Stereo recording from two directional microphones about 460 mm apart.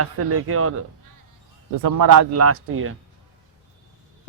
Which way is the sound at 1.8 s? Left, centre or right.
Right.